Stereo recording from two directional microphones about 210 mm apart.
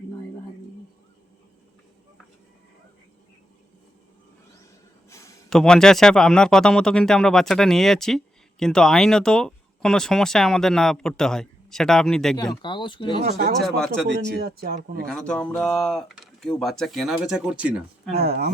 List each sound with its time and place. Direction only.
5.0 s a sound: 15° left (ahead or behind)
5.5 s speech: 5° left (ahead or behind)
12.6 s speech: 20° left (ahead or behind)
13.6 s speech: centre (ahead or behind)
14.1 s speech: 50° right (ahead or behind)
15.0 s speech: 5° left (ahead or behind)
18.2 s speech: 50° right (ahead or behind)